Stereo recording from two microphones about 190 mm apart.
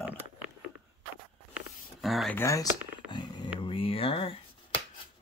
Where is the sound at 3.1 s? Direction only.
20° left (ahead or behind).